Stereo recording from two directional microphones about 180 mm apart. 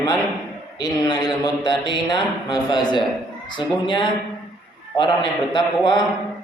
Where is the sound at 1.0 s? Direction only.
25° left (ahead or behind).